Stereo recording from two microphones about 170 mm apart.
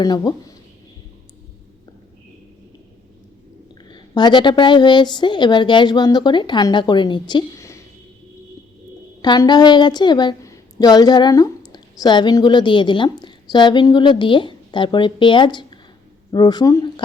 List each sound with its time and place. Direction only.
0.0 s a woman's voice: 25° left (ahead or behind)
3.8 s a woman's voice: 25° left (ahead or behind)
9.2 s a woman's voice: 25° left (ahead or behind)